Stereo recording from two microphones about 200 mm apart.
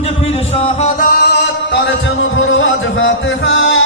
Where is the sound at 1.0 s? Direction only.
50° left (ahead or behind).